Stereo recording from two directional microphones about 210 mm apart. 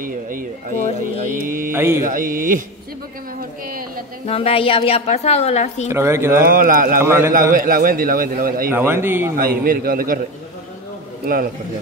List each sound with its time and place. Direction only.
0.0 s speech: 40° right (ahead or behind)
1.2 s mantra: 40° right (ahead or behind)
1.7 s speech: 10° right (ahead or behind)
2.0 s speech: 40° right (ahead or behind)
3.6 s a sound: 40° right (ahead or behind)
4.3 s a woman's voice: 30° left (ahead or behind)
5.9 s speech: 15° right (ahead or behind)
6.4 s speech: 40° right (ahead or behind)
7.0 s speech: 10° right (ahead or behind)
7.5 s speech: 40° right (ahead or behind)
8.7 s speech: 10° right (ahead or behind)
9.4 s speech: 45° right (ahead or behind)
11.2 s speech: 45° right (ahead or behind)